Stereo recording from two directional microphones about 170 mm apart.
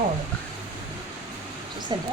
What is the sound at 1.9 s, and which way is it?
Speech, 25° right (ahead or behind).